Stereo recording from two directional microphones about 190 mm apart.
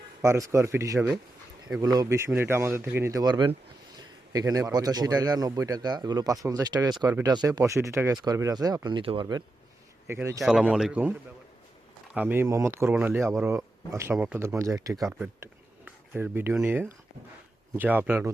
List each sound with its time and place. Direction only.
0.2 s speech: 15° right (ahead or behind)
10.1 s speech: 15° right (ahead or behind)
10.4 s speech: centre (ahead or behind)
12.1 s speech: 10° right (ahead or behind)